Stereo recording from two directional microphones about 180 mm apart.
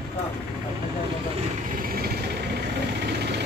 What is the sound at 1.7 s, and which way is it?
Vehicle, 55° right (ahead or behind).